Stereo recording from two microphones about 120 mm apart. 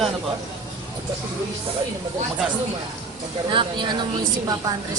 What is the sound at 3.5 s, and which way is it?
Speech, 40° right (ahead or behind).